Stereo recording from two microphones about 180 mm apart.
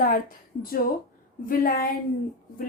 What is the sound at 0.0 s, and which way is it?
A woman's voice, 50° left (ahead or behind).